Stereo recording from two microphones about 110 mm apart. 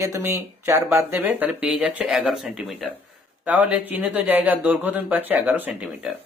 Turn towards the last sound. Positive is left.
turn(degrees=-10)  # may be behind; listen again after turning